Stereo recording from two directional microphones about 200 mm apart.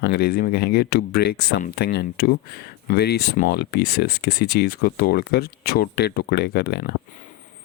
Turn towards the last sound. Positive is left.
turn(degrees=55)  # may be behind; listen again after turning